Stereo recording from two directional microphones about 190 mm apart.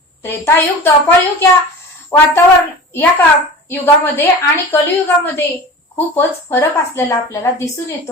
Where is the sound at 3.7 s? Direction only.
10° left (ahead or behind).